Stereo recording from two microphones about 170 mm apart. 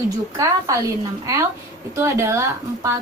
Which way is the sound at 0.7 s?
20° right (ahead or behind).